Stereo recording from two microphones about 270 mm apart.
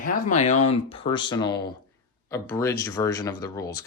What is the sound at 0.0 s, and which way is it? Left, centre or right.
Speech, left.